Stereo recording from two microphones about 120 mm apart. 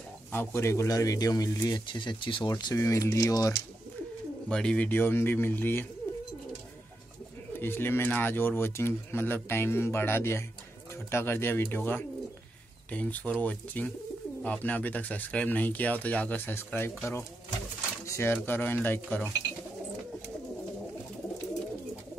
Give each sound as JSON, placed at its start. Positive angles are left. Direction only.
{"t": 0.3, "sound": "a man's voice", "side_deg": 20}
{"t": 2.5, "sound": "speech", "side_deg": 30}
{"t": 4.5, "sound": "speech", "side_deg": 5}
{"t": 7.5, "sound": "speech", "side_deg": 20}